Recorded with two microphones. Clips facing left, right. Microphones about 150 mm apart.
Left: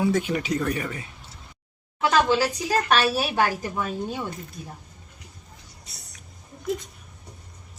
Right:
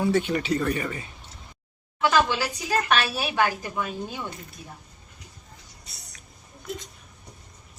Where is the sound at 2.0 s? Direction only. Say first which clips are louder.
Left 2 dB; 35° left (ahead or behind).